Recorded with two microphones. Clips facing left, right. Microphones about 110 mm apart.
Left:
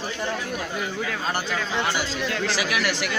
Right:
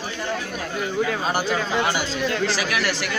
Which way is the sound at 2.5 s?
15° left (ahead or behind).